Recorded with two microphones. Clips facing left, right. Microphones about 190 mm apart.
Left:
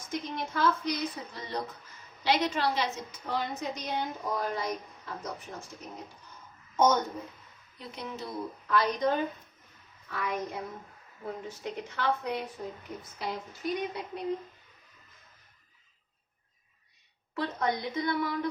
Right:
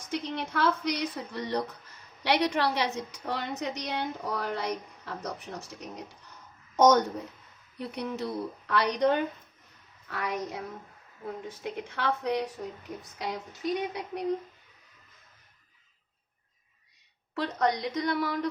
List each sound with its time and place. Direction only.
0.1 s a woman's voice: 65° right (ahead or behind)
11.9 s a woman's voice: 60° right (ahead or behind)
17.3 s a woman's voice: 75° right (ahead or behind)